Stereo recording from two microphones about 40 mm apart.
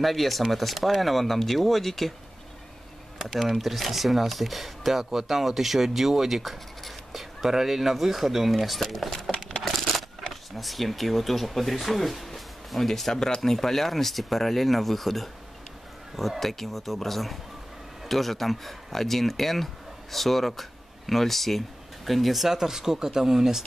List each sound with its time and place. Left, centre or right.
0.0 s speech: centre
3.3 s speech: centre